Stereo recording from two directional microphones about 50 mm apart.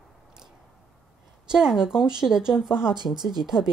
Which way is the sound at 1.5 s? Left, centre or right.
Centre.